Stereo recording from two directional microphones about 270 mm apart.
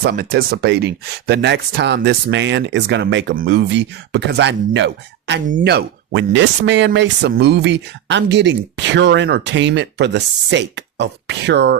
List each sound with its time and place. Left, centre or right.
0.0 s speech: right